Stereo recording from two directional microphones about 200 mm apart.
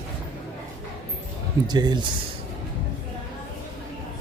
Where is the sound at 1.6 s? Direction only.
20° right (ahead or behind).